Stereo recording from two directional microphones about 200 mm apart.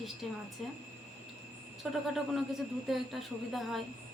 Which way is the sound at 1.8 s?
Centre (ahead or behind).